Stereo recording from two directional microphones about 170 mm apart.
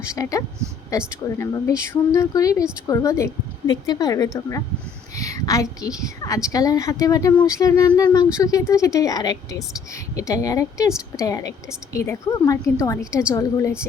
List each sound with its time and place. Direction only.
0.1 s speech: 20° left (ahead or behind)